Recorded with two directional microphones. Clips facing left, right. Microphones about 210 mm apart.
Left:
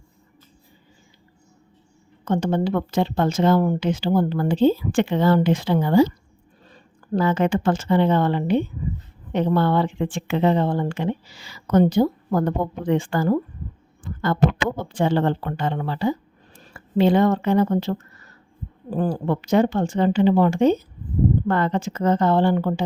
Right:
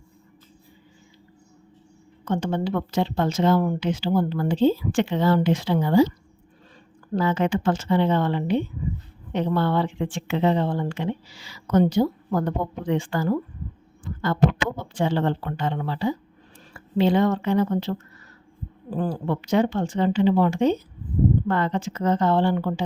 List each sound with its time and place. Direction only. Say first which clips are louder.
2.2 s speech: left 3 dB; 40° left (ahead or behind)
7.1 s a woman's voice: left 2 dB; 50° left (ahead or behind)
18.9 s speech: left 3 dB; 45° left (ahead or behind)